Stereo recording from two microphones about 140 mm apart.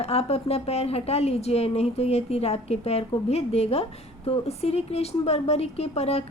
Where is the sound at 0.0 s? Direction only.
50° left (ahead or behind).